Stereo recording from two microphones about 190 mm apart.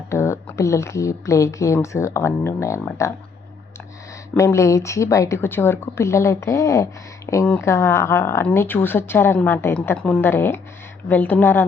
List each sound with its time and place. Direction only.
0.1 s speech: 15° left (ahead or behind)
4.4 s speech: 15° left (ahead or behind)